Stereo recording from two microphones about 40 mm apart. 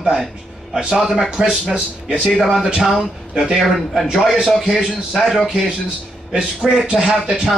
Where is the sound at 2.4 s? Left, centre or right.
Centre.